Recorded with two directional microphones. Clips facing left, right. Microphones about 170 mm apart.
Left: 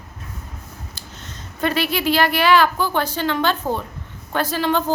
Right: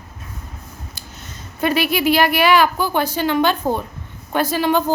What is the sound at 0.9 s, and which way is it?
A woman's voice, 10° right (ahead or behind).